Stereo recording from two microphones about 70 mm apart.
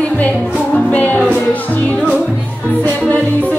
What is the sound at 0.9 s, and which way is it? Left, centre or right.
Music, left.